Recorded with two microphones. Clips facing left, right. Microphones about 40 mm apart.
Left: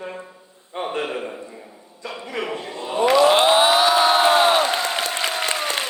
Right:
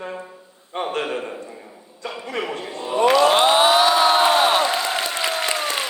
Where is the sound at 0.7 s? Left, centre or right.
Right.